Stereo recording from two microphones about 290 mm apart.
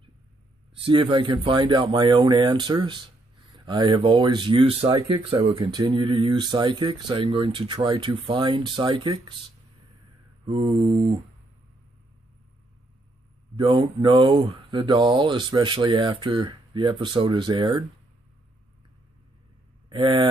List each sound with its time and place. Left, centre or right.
0.7 s speech: centre
10.4 s speech: centre
13.6 s speech: centre
19.9 s speech: centre